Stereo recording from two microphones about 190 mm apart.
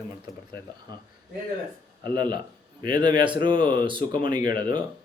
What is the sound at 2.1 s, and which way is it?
Speech, 20° right (ahead or behind).